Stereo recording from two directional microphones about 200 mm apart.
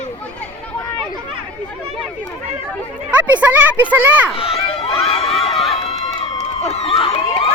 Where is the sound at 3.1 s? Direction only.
10° right (ahead or behind).